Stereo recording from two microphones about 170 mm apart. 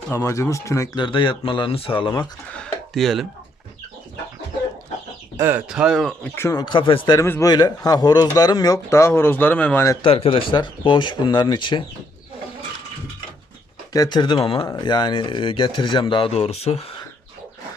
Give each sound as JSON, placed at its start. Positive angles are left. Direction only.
{"t": 0.1, "sound": "speech", "side_deg": 20}
{"t": 2.6, "sound": "a sound", "side_deg": 0}
{"t": 5.4, "sound": "speech", "side_deg": -10}
{"t": 7.2, "sound": "speech", "side_deg": 15}
{"t": 10.0, "sound": "speech", "side_deg": 35}
{"t": 13.9, "sound": "speech", "side_deg": 25}